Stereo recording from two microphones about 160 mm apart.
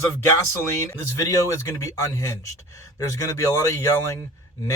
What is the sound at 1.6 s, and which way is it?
Speech, 20° left (ahead or behind).